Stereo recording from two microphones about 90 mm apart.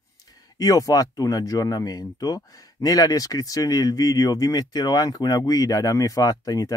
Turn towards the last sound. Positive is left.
turn(degrees=40)  # may be behind; listen again after turning